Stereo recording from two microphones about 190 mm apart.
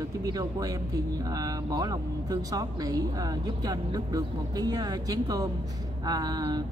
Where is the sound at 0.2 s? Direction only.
20° right (ahead or behind).